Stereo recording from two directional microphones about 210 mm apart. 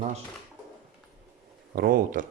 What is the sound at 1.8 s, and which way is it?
Speech, 45° right (ahead or behind).